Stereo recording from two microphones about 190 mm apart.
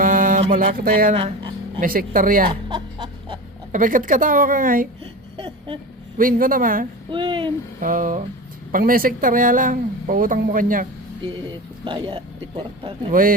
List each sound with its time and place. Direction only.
0.0 s mantra: 45° right (ahead or behind)
0.5 s speech: 45° right (ahead or behind)
1.1 s dog: 25° right (ahead or behind)
1.8 s speech: 45° right (ahead or behind)
2.5 s music: 25° right (ahead or behind)
3.7 s speech: 45° right (ahead or behind)
5.4 s a sound: 25° right (ahead or behind)
6.1 s speech: 45° right (ahead or behind)
7.1 s a man's voice: 25° right (ahead or behind)
7.8 s speech: 45° right (ahead or behind)
11.9 s a man's voice: 25° right (ahead or behind)
13.1 s speech: 45° right (ahead or behind)